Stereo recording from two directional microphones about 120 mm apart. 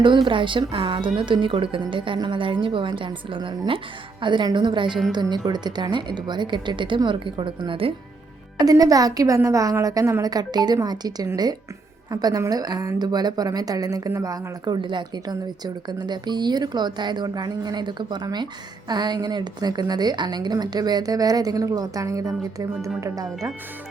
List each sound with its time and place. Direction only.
0.3 s a woman's voice: 45° right (ahead or behind)
8.5 s a woman's voice: 30° right (ahead or behind)